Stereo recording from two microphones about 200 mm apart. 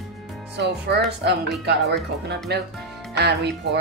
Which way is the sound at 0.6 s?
55° right (ahead or behind).